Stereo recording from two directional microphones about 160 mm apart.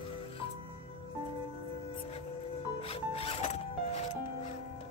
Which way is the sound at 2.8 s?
40° left (ahead or behind).